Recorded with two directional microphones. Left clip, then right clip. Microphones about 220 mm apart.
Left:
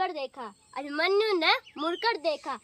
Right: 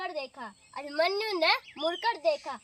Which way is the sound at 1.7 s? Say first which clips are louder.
Even; 45° left (ahead or behind).